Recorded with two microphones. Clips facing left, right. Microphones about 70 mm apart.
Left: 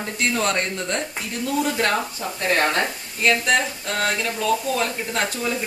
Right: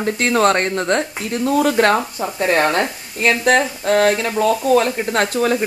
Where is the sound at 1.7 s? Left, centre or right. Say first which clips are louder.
Right 7 dB; right.